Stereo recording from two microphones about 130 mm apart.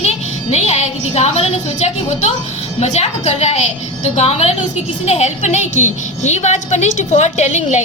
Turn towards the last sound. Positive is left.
turn(degrees=65)  # may be behind; listen again after turning